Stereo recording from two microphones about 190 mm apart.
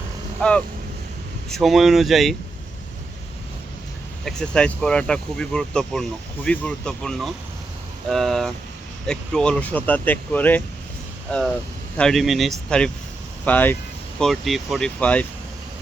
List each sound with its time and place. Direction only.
1.5 s speech: centre (ahead or behind)
4.3 s speech: 5° left (ahead or behind)